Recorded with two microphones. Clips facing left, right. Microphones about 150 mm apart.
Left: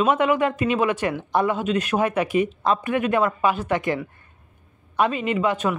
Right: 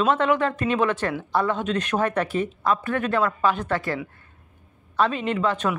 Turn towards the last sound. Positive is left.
turn(degrees=10)  # may be behind; listen again after turning